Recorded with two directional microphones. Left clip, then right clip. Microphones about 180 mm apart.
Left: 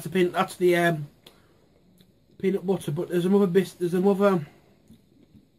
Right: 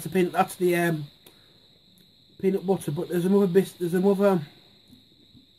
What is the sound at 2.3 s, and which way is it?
A man's voice, 30° right (ahead or behind).